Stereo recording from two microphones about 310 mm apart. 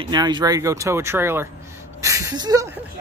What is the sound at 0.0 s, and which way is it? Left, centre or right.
Speech, centre.